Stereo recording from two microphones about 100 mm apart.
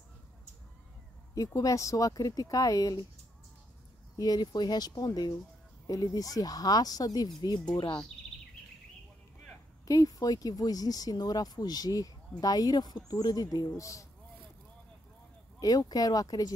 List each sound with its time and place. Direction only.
1.3 s speech: 35° left (ahead or behind)
4.2 s speech: 40° left (ahead or behind)
9.8 s speech: 40° left (ahead or behind)
15.6 s speech: 40° left (ahead or behind)